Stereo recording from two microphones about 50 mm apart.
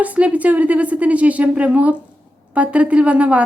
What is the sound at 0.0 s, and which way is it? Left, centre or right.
A woman's voice, right.